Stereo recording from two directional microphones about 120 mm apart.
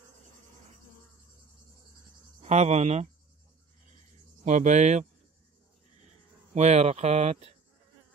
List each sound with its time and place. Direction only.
2.4 s speech: 65° right (ahead or behind)
4.5 s speech: 80° right
6.5 s speech: 65° right (ahead or behind)